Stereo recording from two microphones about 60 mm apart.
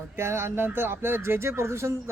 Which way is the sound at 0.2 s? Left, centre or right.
Right.